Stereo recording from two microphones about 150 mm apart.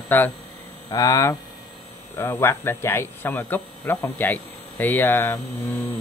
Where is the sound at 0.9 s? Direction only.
25° left (ahead or behind).